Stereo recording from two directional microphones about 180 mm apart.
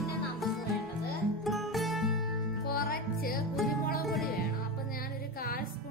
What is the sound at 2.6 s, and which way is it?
Music, 55° left (ahead or behind).